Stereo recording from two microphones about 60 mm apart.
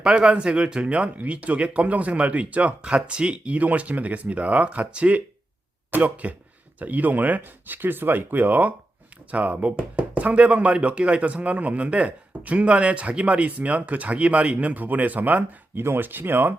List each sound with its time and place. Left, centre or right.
0.0 s speech: centre; by 16.6 s right